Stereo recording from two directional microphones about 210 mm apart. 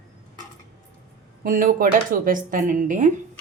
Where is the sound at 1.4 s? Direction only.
40° right (ahead or behind).